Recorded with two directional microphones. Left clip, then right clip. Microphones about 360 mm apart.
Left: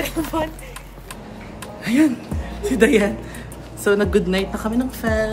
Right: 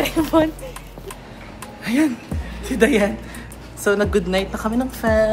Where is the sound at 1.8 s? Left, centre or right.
Centre.